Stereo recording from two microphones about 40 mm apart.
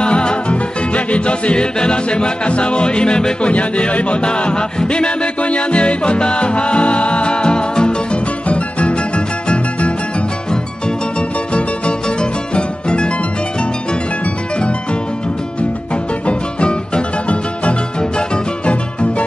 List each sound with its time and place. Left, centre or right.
0.0 s music: left
3.5 s music: left
11.1 s music: left
16.3 s music: left